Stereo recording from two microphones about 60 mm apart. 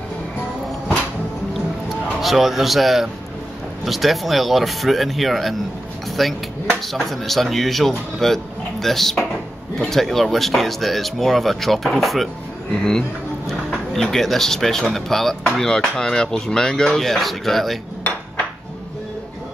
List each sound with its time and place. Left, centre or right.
2.2 s speech: centre
13.5 s speech: centre